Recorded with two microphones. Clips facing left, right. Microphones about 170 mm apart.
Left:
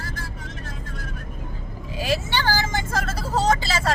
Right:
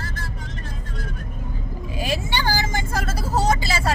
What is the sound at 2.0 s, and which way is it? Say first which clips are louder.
Vehicle: left 1 dB; 15° right (ahead or behind).